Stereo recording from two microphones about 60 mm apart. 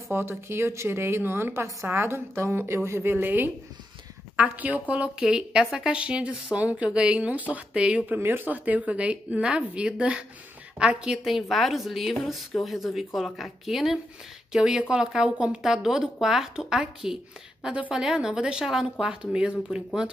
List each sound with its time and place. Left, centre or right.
0.1 s a woman's voice: right; by 8.2 s centre
8.2 s a woman's voice: right; by 11.1 s centre
11.2 s a woman's voice: centre
14.5 s a woman's voice: centre
17.7 s a woman's voice: right